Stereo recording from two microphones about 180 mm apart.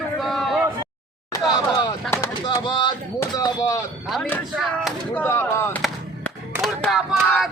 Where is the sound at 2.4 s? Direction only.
25° left (ahead or behind).